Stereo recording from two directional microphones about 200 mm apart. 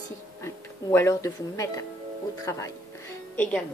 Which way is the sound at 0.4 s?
15° left (ahead or behind).